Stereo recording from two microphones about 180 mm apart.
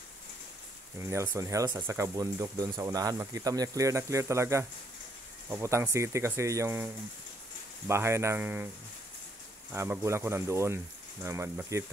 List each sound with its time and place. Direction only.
0.9 s speech: 15° right (ahead or behind)
7.9 s speech: 15° right (ahead or behind)
9.7 s speech: 15° right (ahead or behind)